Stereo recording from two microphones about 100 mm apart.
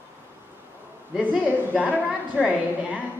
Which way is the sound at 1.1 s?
15° right (ahead or behind).